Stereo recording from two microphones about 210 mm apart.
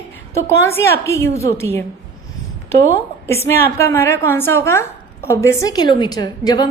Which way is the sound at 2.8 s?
10° left (ahead or behind).